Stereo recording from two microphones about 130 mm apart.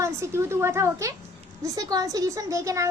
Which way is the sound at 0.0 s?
20° right (ahead or behind).